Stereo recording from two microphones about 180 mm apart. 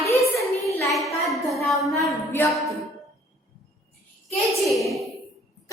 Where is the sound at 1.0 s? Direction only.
Centre (ahead or behind).